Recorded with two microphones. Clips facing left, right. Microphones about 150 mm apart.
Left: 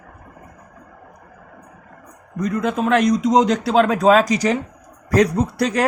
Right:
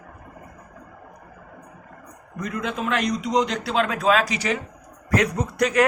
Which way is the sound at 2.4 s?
45° left (ahead or behind).